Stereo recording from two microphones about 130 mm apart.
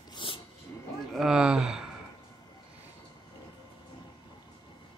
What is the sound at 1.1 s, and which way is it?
Speech, 5° right (ahead or behind).